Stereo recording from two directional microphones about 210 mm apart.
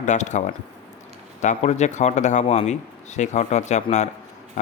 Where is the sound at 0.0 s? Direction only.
35° left (ahead or behind).